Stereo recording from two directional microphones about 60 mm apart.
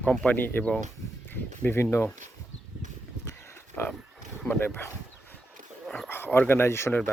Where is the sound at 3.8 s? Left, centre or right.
Left.